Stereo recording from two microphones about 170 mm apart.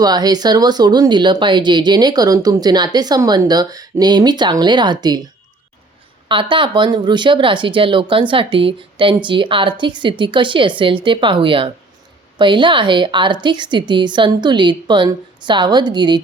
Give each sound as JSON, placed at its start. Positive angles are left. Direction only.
{"t": 0.0, "sound": "speech", "side_deg": -25}
{"t": 6.2, "sound": "speech", "side_deg": -30}